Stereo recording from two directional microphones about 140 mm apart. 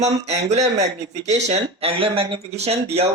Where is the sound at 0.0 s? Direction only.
50° right (ahead or behind).